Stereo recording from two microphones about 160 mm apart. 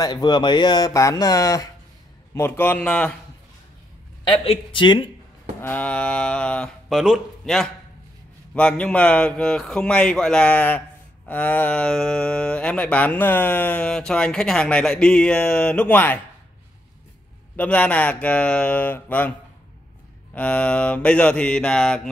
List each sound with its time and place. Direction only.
0.0 s speech: 25° left (ahead or behind); by 3.2 s 5° left (ahead or behind)
4.2 s a man's voice: 30° left (ahead or behind)
5.6 s a man's voice: 10° left (ahead or behind)
17.6 s speech: 5° left (ahead or behind)
20.3 s speech: 10° left (ahead or behind)